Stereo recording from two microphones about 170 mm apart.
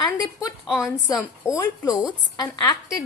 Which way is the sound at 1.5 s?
20° left (ahead or behind).